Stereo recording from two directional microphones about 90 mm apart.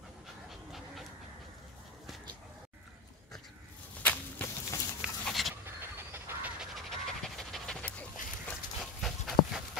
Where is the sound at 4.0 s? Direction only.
20° left (ahead or behind).